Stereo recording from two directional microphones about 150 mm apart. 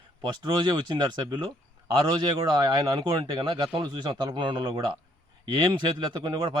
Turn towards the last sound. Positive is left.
turn(degrees=-30)  # may be behind; listen again after turning